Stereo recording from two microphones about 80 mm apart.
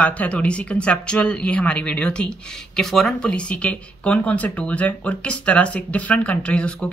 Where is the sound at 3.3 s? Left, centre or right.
Centre.